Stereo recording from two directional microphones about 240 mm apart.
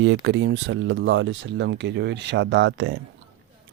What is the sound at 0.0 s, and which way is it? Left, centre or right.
Speech, right.